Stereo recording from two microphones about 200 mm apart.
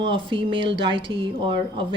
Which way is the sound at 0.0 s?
25° right (ahead or behind).